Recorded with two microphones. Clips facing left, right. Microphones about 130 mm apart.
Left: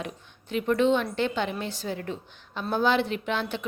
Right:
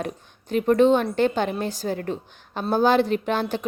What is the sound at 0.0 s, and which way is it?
A woman's voice, 45° right (ahead or behind).